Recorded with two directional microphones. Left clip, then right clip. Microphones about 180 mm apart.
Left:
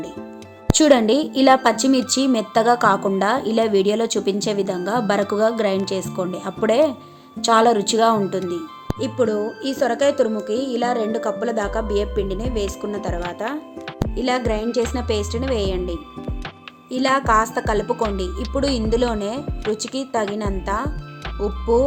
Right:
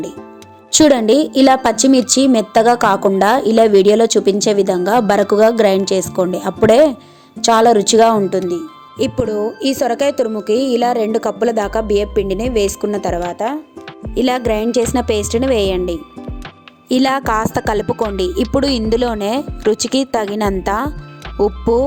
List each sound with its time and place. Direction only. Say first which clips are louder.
0.7 s a woman's voice: right 4 dB; 40° right (ahead or behind)
9.0 s speech: right 4 dB; 45° right (ahead or behind)
13.4 s speech: right 6 dB; 30° right (ahead or behind)
14.2 s speech: right 6 dB; 45° right (ahead or behind)
16.9 s a woman's voice: right 2 dB; 55° right (ahead or behind)